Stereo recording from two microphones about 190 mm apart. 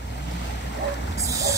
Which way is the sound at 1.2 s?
15° right (ahead or behind).